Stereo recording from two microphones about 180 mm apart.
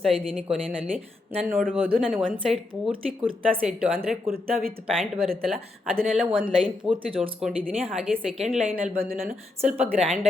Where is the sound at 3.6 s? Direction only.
Centre (ahead or behind).